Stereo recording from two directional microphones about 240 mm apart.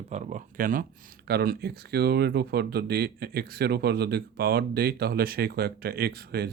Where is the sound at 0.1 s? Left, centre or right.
Right.